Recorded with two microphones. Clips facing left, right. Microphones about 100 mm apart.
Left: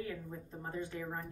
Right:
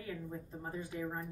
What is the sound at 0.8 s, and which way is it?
Speech, 10° right (ahead or behind).